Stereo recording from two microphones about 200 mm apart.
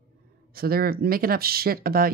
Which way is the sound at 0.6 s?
50° right (ahead or behind).